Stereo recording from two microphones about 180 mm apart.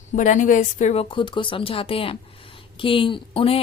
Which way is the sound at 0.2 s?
45° left (ahead or behind).